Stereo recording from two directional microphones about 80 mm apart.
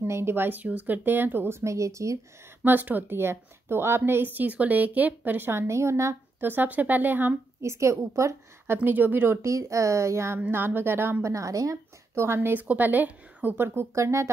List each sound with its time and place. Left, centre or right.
0.0 s a woman's voice: right
2.6 s a woman's voice: right
6.4 s a woman's voice: right
7.6 s speech: right
8.7 s speech: right
10.4 s speech: right
12.4 s a woman's voice: right